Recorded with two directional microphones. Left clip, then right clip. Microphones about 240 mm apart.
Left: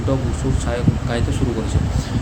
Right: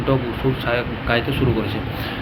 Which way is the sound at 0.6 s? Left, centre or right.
Centre.